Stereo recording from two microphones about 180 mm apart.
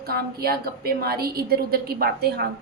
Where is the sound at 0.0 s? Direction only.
60° right (ahead or behind).